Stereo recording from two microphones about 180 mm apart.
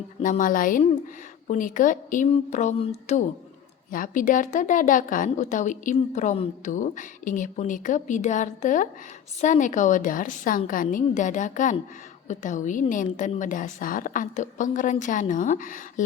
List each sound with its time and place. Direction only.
0.2 s a woman's voice: 45° left (ahead or behind)
3.9 s a woman's voice: 50° left (ahead or behind)